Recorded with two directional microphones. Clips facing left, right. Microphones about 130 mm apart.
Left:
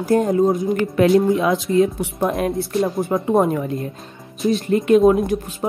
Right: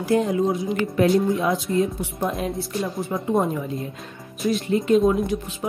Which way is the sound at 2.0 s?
70° left (ahead or behind).